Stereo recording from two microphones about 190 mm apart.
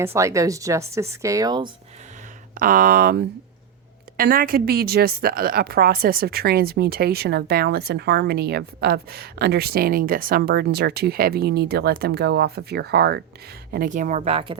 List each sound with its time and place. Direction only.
0.0 s speech: 15° right (ahead or behind)
2.6 s a woman's voice: 50° right (ahead or behind)
13.7 s speech: 45° right (ahead or behind)
14.3 s speech: 25° right (ahead or behind)